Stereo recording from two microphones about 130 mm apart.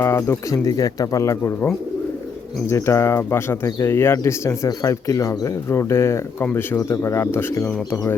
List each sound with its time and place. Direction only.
0.0 s speech: 20° left (ahead or behind)